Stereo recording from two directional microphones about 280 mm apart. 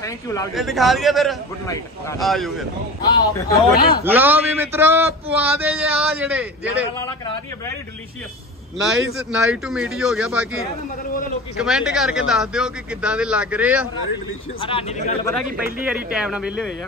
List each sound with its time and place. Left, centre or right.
0.0 s speech: centre
0.6 s a man's voice: centre
3.0 s speech: centre
4.0 s a man's voice: centre
8.8 s a man's voice: centre
14.6 s a man's voice: centre
15.8 s a man's voice: centre